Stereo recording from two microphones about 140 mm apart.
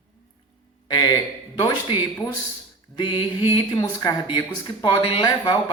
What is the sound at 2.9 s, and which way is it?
A man's voice, 35° left (ahead or behind).